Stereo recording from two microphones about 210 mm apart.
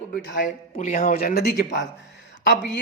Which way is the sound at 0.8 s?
35° left (ahead or behind).